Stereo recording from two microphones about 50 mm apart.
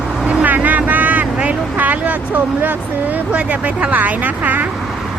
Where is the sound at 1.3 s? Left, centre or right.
Right.